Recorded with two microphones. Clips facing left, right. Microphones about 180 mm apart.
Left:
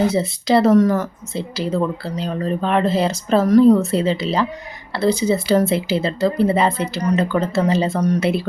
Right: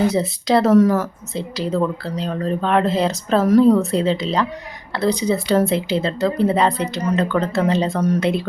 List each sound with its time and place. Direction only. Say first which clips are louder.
0.1 s speech: left 1 dB; centre (ahead or behind)